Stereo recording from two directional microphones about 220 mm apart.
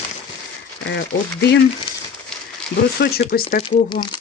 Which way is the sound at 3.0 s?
50° left (ahead or behind).